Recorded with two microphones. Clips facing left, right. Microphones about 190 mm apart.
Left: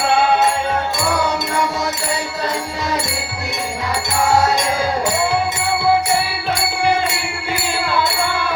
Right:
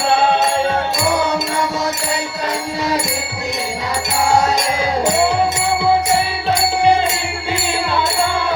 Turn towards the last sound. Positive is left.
turn(degrees=-20)  # may be behind; listen again after turning